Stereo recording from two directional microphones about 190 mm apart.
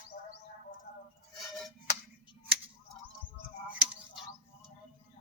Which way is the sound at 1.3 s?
Centre (ahead or behind).